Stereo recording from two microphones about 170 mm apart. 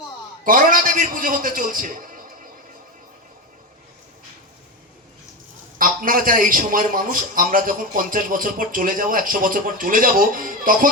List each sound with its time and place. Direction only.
0.4 s a man's voice: 55° right (ahead or behind)
5.8 s a man's voice: 55° right (ahead or behind)